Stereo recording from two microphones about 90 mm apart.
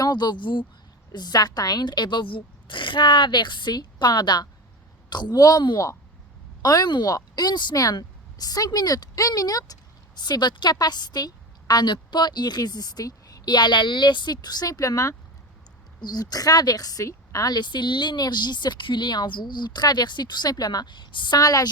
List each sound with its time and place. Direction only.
0.0 s speech: 55° left (ahead or behind)
1.1 s a woman's voice: 50° left (ahead or behind)